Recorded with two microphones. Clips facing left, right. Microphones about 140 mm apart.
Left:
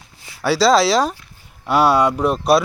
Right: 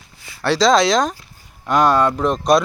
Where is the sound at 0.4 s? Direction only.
5° left (ahead or behind).